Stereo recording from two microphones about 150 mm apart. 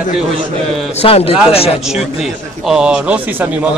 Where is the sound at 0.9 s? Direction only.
40° left (ahead or behind).